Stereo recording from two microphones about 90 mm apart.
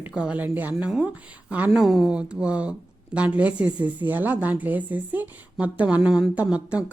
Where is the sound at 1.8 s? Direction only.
Centre (ahead or behind).